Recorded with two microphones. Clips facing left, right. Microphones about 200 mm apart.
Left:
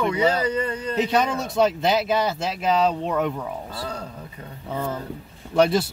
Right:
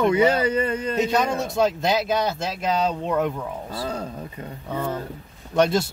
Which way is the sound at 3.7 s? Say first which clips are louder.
Right 3 dB; 25° right (ahead or behind).